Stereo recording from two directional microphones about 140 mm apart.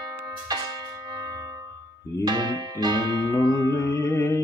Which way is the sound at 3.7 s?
20° left (ahead or behind).